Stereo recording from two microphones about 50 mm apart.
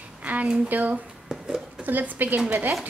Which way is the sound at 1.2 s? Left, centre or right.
Centre.